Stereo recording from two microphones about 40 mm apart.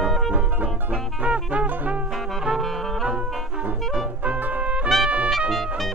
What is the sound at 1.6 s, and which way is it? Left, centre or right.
Music, right.